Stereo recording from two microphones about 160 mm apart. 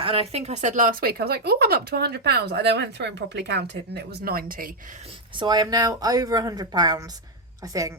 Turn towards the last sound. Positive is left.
turn(degrees=-20)  # may be behind; listen again after turning